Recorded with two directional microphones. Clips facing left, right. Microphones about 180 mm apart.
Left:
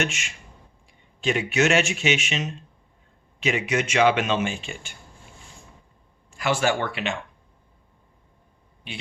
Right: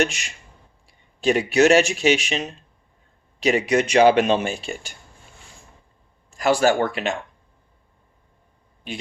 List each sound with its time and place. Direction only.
0.0 s speech: 35° right (ahead or behind)
6.3 s speech: 40° right (ahead or behind)